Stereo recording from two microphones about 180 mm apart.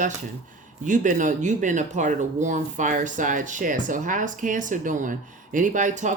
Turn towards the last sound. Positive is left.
turn(degrees=-45)  # may be behind; listen again after turning